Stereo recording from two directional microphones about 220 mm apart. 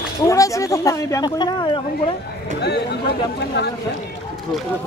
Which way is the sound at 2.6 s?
50° left (ahead or behind).